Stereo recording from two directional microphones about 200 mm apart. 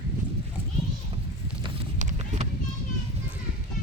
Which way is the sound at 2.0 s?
35° right (ahead or behind).